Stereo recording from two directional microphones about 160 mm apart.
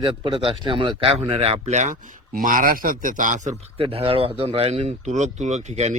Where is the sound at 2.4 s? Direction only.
60° right (ahead or behind).